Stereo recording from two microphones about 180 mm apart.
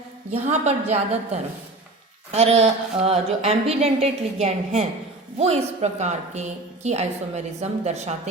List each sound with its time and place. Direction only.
0.3 s speech: 40° right (ahead or behind)